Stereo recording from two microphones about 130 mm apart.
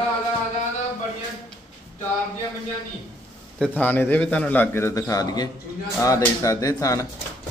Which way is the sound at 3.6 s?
15° left (ahead or behind).